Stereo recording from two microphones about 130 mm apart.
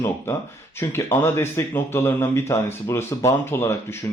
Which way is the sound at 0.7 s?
20° left (ahead or behind).